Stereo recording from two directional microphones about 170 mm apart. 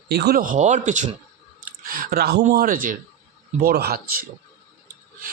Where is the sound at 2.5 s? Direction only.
60° right (ahead or behind).